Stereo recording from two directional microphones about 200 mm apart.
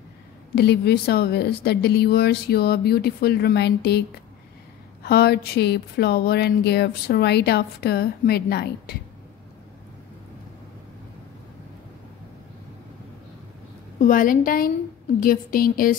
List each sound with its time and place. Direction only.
0.6 s speech: 55° left (ahead or behind)
5.0 s speech: 55° left (ahead or behind)
13.9 s speech: 40° left (ahead or behind)